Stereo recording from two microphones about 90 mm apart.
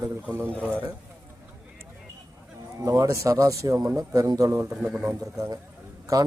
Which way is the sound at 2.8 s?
40° right (ahead or behind).